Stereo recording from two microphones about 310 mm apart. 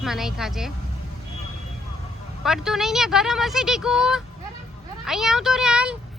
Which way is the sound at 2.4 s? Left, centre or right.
Centre.